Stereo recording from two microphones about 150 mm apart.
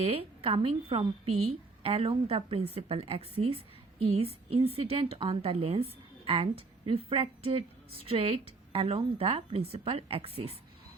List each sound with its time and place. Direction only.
0.0 s a woman's voice: 40° right (ahead or behind)